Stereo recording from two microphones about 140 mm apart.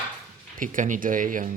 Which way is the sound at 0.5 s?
70° right (ahead or behind).